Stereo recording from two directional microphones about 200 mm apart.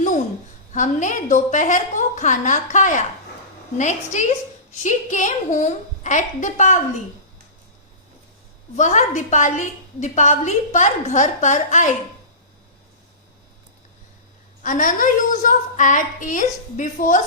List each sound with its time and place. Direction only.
0.7 s a woman's voice: 40° left (ahead or behind)
8.7 s a woman's voice: 35° left (ahead or behind)
14.6 s a woman's voice: 40° left (ahead or behind)